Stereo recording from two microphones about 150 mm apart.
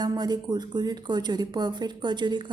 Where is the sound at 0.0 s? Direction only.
25° right (ahead or behind).